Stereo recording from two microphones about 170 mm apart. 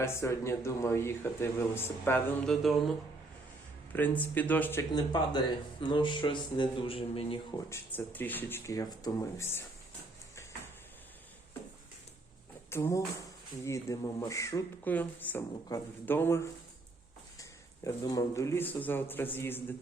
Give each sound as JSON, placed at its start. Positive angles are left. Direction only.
{"t": 0.0, "sound": "speech", "side_deg": 15}
{"t": 3.9, "sound": "speech", "side_deg": 10}
{"t": 7.7, "sound": "speech", "side_deg": 10}
{"t": 12.7, "sound": "speech", "side_deg": 15}
{"t": 17.8, "sound": "speech", "side_deg": 20}